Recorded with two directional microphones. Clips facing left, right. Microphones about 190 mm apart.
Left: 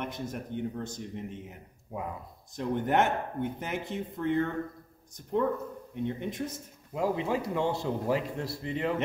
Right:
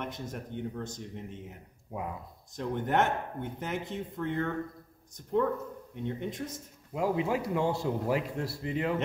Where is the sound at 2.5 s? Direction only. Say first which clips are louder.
Left 2 dB; 10° left (ahead or behind).